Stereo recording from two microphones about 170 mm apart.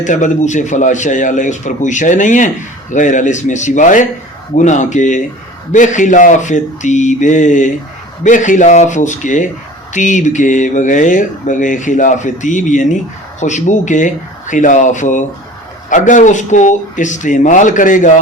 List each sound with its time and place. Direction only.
0.0 s speech: 45° left (ahead or behind)